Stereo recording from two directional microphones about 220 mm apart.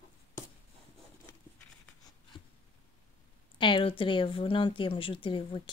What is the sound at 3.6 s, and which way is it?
Speech, 20° left (ahead or behind).